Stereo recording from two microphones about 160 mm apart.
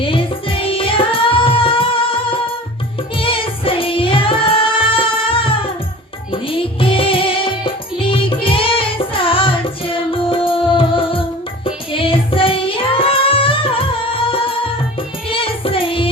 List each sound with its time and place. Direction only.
0.0 s music: 35° left (ahead or behind)